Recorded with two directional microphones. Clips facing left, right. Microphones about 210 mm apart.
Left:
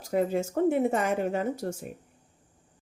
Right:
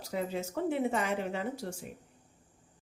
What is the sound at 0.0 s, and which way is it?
Speech, 50° left (ahead or behind).